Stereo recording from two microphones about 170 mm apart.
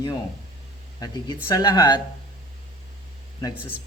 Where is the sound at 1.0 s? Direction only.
25° left (ahead or behind).